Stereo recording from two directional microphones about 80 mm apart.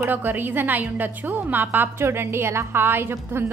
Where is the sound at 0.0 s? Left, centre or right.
Right.